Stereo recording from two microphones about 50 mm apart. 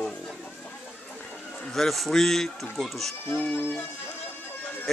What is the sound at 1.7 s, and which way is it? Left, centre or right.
Speech, centre.